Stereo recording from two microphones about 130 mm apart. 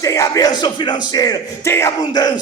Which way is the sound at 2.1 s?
30° left (ahead or behind).